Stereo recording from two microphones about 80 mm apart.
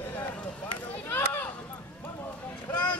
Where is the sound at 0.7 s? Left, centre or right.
Left.